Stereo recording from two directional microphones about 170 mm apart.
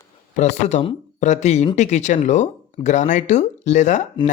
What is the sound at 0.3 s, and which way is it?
Speech, 45° left (ahead or behind).